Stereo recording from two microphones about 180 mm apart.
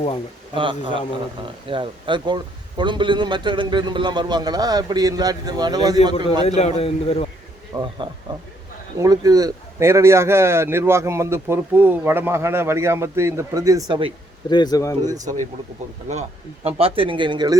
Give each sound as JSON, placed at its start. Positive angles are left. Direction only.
{"t": 0.5, "sound": "a man's voice", "side_deg": -25}
{"t": 6.6, "sound": "a man's voice", "side_deg": 35}
{"t": 7.7, "sound": "a man's voice", "side_deg": -20}
{"t": 14.5, "sound": "speech", "side_deg": 20}
{"t": 15.1, "sound": "a man's voice", "side_deg": -20}
{"t": 16.6, "sound": "a man's voice", "side_deg": -35}